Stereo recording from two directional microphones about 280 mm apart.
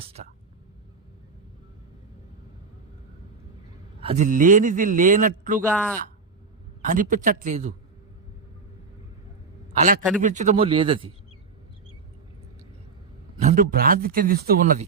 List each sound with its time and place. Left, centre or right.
0.2 s speech: right
4.0 s speech: right
5.6 s speech: centre
6.8 s speech: right
10.2 s speech: right
13.3 s speech: right